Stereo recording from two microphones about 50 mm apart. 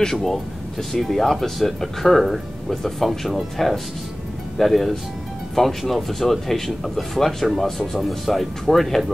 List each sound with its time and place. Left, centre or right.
0.0 s speech: centre